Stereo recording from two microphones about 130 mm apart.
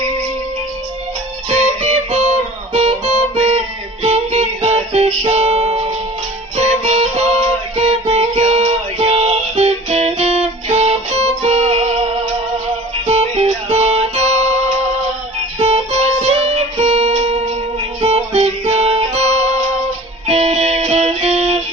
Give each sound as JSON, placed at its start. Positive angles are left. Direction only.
{"t": 1.5, "sound": "music", "side_deg": -60}
{"t": 15.5, "sound": "music", "side_deg": -50}